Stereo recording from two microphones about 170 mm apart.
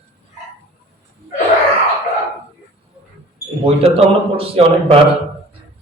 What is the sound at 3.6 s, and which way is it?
A man's voice, 35° right (ahead or behind).